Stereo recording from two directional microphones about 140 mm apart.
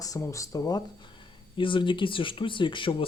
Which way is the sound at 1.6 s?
35° left (ahead or behind).